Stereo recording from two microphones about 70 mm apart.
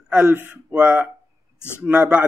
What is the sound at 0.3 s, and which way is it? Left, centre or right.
A man's voice, right.